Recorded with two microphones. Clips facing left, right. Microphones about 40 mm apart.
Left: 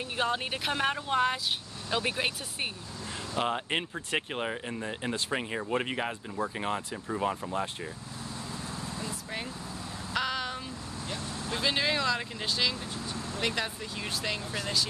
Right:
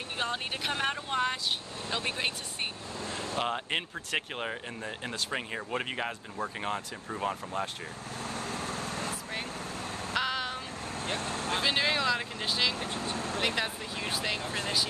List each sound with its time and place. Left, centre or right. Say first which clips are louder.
0.2 s speech: left 3 dB; centre
8.5 s vehicle: right 3 dB; right
10.1 s a sound: even; centre
11.0 s vehicle: right 5 dB; right
11.6 s speech: left 1 dB; centre
12.7 s vehicle: right 3 dB; right
13.6 s speech: right 1 dB; centre